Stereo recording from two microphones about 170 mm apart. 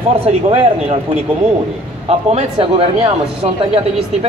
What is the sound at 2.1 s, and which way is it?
A man's voice, 35° right (ahead or behind).